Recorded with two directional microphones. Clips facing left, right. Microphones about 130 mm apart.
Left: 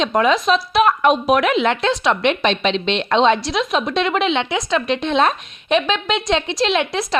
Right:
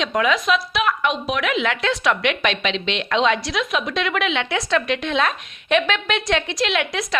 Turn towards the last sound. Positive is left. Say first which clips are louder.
# left 4 dB
turn(degrees=30)  # may be behind; listen again after turning